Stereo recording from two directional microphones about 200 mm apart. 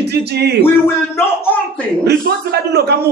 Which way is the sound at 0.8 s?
10° left (ahead or behind).